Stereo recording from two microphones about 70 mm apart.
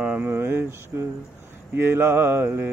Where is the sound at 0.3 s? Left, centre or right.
Right.